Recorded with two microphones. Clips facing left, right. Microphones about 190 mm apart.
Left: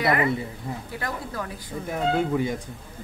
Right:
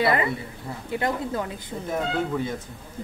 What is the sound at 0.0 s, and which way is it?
A man's voice, 25° right (ahead or behind).